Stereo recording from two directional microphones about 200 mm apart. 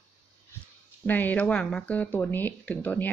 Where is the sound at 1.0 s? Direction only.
10° left (ahead or behind).